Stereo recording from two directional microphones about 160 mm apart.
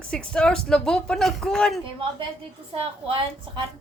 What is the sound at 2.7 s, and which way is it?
Speech, 35° right (ahead or behind).